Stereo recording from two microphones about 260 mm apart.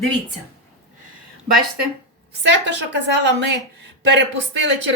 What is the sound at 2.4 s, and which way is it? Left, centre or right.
Speech, right.